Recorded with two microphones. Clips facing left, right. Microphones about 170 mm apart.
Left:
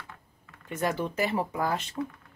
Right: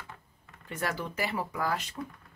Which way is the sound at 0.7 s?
20° left (ahead or behind).